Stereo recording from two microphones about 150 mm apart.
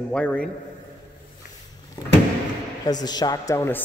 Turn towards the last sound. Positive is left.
turn(degrees=15)  # may be behind; listen again after turning